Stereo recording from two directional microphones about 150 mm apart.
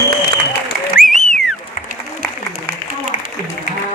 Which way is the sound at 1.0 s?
Centre (ahead or behind).